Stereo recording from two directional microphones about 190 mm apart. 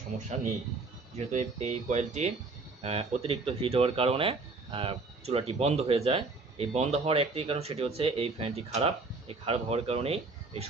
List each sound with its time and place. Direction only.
1.1 s speech: 35° right (ahead or behind)